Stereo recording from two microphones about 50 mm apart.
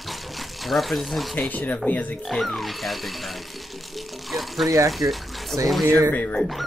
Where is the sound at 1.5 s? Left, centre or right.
Left.